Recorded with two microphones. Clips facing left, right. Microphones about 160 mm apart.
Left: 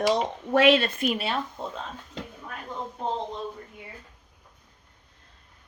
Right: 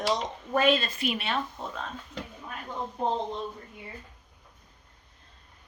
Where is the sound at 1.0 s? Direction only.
40° left (ahead or behind).